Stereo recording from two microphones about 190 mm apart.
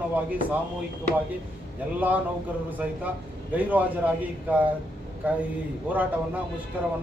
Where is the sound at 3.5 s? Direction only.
10° right (ahead or behind).